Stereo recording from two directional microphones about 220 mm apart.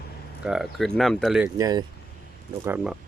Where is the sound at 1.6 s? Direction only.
15° right (ahead or behind).